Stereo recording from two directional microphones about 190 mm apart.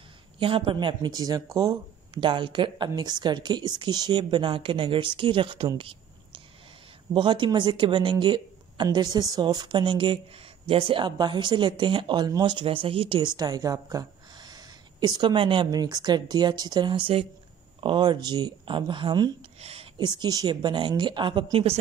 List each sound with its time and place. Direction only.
0.4 s speech: 25° right (ahead or behind)